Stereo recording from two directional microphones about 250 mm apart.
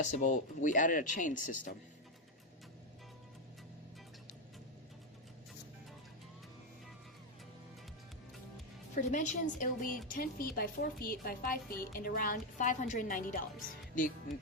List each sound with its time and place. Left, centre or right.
0.0 s a woman's voice: left
9.0 s a woman's voice: left